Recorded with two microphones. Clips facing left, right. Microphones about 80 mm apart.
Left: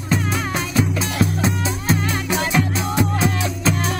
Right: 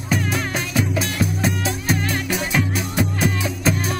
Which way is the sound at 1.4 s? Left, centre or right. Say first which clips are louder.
Left 1 dB; left.